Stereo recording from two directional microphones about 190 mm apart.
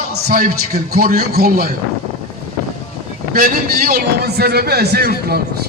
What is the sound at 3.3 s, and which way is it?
A man's voice, 50° right (ahead or behind).